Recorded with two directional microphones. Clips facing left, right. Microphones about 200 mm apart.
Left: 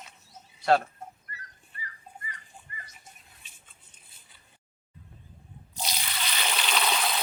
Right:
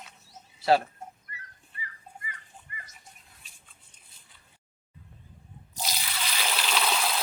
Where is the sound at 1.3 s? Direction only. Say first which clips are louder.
Left 1 dB; 40° left (ahead or behind).